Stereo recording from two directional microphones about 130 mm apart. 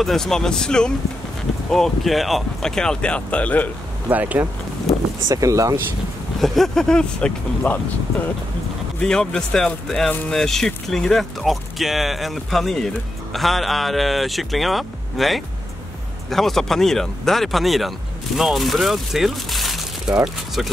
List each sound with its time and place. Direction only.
0.0 s speech: centre (ahead or behind)
4.1 s speech: 10° right (ahead or behind)
5.3 s speech: 25° right (ahead or behind)
6.4 s speech: centre (ahead or behind)
9.0 s speech: 5° left (ahead or behind)